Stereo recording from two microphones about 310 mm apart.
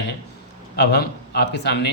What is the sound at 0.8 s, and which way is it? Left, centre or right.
Speech, left.